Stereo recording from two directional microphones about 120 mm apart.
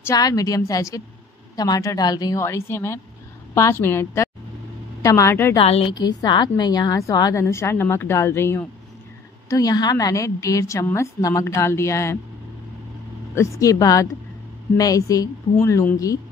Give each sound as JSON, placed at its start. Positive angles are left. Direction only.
{"t": 0.1, "sound": "a woman's voice", "side_deg": 30}
{"t": 5.6, "sound": "a woman's voice", "side_deg": 55}
{"t": 5.9, "sound": "a woman's voice", "side_deg": 35}
{"t": 9.5, "sound": "a woman's voice", "side_deg": 30}
{"t": 13.3, "sound": "a woman's voice", "side_deg": 25}